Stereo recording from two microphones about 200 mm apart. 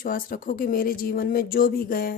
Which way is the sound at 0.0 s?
45° left (ahead or behind).